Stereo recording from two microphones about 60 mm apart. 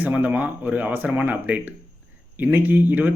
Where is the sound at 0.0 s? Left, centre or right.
Right.